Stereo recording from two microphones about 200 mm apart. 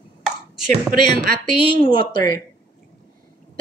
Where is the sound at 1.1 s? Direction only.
50° right (ahead or behind).